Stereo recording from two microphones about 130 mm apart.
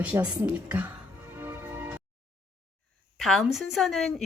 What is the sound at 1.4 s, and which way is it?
Music, 15° right (ahead or behind).